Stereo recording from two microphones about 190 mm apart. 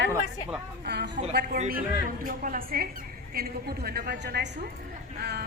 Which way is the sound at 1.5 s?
40° right (ahead or behind).